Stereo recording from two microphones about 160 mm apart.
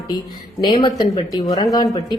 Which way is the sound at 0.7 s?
35° left (ahead or behind).